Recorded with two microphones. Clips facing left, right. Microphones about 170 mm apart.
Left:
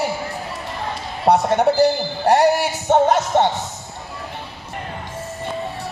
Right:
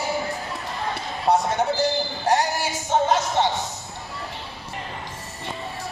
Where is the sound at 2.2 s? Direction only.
60° left (ahead or behind).